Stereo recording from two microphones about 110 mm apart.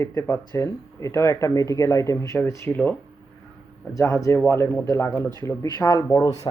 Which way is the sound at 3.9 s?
25° left (ahead or behind).